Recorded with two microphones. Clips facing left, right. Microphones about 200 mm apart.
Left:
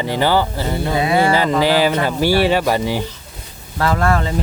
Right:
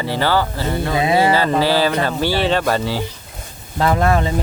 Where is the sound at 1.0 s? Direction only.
20° right (ahead or behind).